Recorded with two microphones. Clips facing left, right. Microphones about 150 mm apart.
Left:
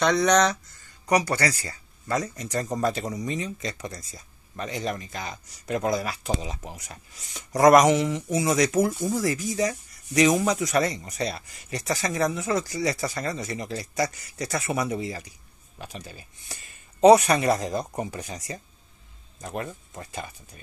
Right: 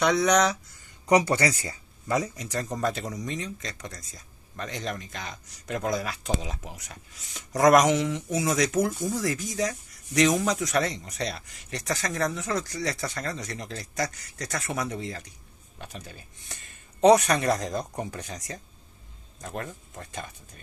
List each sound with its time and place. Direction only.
0.0 s speech: 5° right (ahead or behind)
0.8 s speech: 20° right (ahead or behind)
2.3 s speech: centre (ahead or behind)